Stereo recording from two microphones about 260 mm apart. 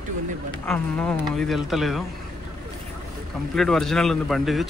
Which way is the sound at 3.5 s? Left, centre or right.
Centre.